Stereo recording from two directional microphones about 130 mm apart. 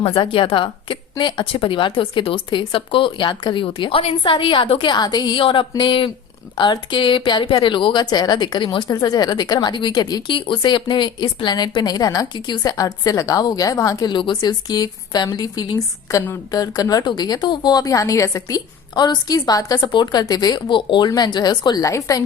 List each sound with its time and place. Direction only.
0.0 s a woman's voice: 45° left (ahead or behind); by 22.2 s 25° left (ahead or behind)